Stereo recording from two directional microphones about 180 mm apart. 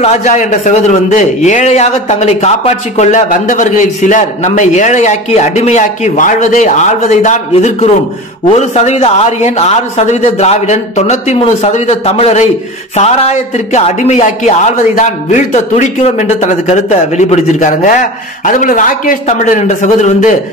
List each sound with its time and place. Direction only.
0.0 s a man's voice: 40° left (ahead or behind)